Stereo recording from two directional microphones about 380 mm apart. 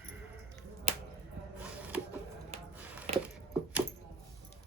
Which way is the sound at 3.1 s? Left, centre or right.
Centre.